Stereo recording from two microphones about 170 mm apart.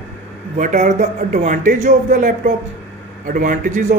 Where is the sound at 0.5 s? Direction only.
45° right (ahead or behind).